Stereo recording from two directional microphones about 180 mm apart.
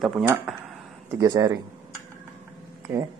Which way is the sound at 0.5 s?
Centre (ahead or behind).